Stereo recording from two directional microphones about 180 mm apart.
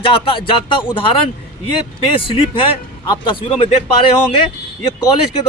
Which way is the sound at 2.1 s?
30° left (ahead or behind).